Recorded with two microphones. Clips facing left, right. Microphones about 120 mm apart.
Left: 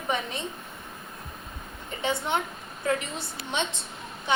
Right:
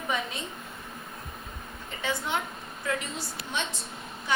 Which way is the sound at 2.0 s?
20° left (ahead or behind).